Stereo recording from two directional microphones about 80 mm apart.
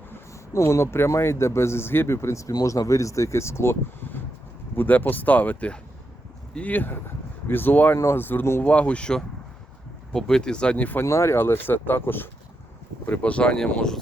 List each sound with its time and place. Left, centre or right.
0.1 s speech: left
2.5 s speech: left
7.9 s speech: left
8.6 s speech: centre
11.0 s speech: left; by 14.0 s centre